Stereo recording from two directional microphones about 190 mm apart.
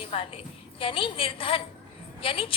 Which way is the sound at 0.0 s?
30° left (ahead or behind).